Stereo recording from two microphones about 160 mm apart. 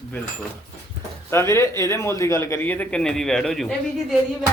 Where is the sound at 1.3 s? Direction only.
15° left (ahead or behind).